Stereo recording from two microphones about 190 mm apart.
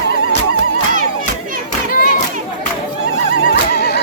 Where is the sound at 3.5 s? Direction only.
55° left (ahead or behind).